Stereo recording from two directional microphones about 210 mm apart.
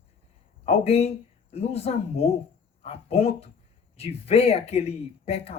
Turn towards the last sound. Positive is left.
turn(degrees=30)  # may be behind; listen again after turning